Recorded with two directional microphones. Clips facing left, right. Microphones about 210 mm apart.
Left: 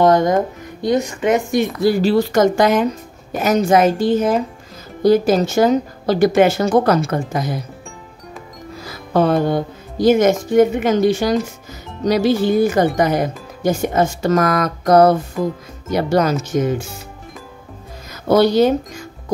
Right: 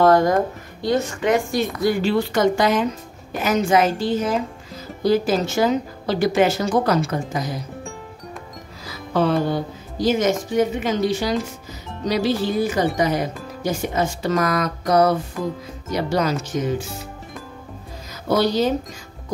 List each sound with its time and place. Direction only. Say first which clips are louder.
0.0 s speech: left 2 dB; 20° left (ahead or behind)
1.9 s speech: left 5 dB; 40° left (ahead or behind)
9.1 s speech: left 4 dB; 50° left (ahead or behind)
18.3 s speech: left 6 dB; 55° left (ahead or behind)